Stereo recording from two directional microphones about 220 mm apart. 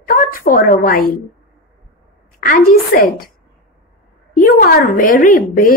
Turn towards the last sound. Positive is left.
turn(degrees=40)  # may be behind; listen again after turning